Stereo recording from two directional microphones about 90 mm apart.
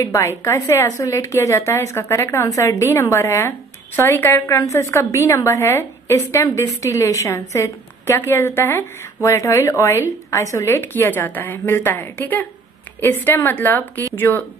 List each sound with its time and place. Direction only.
0.0 s a woman's voice: 35° left (ahead or behind)
4.5 s a woman's voice: 35° left (ahead or behind)